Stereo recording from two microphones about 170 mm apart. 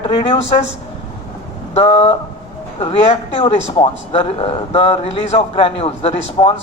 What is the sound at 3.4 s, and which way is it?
Speech, 30° left (ahead or behind).